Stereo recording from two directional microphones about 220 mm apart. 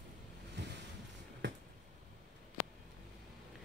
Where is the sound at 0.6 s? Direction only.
50° right (ahead or behind).